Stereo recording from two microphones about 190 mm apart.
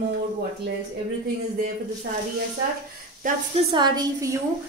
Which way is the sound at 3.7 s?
20° right (ahead or behind).